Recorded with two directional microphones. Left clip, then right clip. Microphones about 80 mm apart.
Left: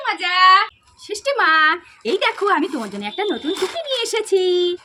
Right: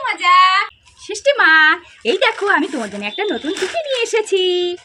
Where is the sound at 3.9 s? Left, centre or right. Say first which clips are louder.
Right 2 dB; left.